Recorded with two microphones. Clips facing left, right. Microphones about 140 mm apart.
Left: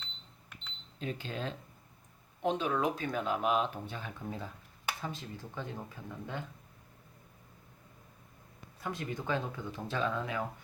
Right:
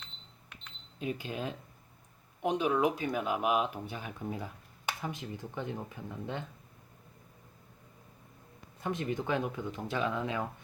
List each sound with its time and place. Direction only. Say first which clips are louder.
0.9 s speech: right 2 dB; 10° right (ahead or behind)
8.8 s speech: right 4 dB; 20° right (ahead or behind)